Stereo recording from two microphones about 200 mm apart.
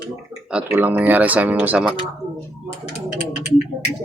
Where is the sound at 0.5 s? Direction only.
10° right (ahead or behind).